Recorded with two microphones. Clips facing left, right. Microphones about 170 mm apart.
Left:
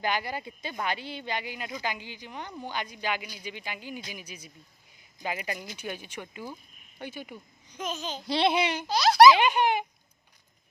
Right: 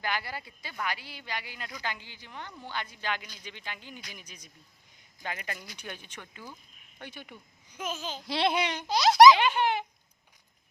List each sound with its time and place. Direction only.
0.0 s speech: 20° left (ahead or behind)
7.7 s speech: 5° right (ahead or behind)
8.9 s speech: 20° right (ahead or behind)
9.4 s speech: 15° left (ahead or behind)